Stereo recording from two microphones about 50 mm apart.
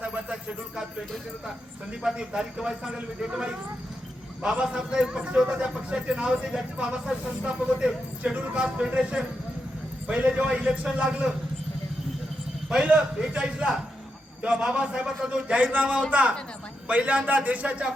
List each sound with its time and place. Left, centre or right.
0.0 s a sound: right
2.1 s a man's voice: centre
12.7 s a man's voice: centre